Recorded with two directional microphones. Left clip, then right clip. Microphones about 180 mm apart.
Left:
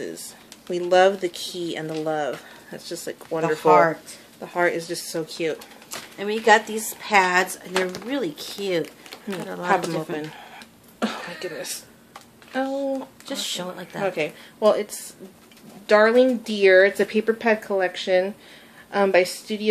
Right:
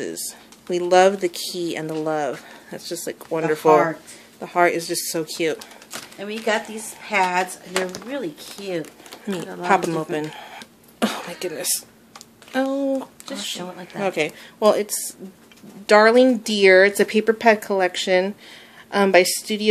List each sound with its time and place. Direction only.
0.7 s speech: 40° right (ahead or behind)
5.9 s speech: 40° left (ahead or behind)
9.7 s a sound: 50° right (ahead or behind)
12.5 s speech: 50° right (ahead or behind)
13.3 s speech: 40° left (ahead or behind)
14.0 s speech: 50° right (ahead or behind)